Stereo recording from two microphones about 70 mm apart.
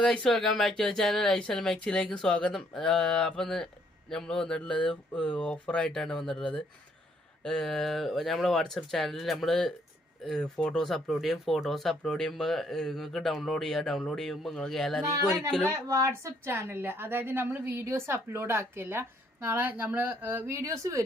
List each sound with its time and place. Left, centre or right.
0.0 s speech: centre
5.2 s speech: centre
15.7 s a woman's voice: right